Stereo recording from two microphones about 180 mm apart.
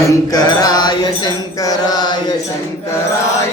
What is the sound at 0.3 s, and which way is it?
Mantra, 20° left (ahead or behind).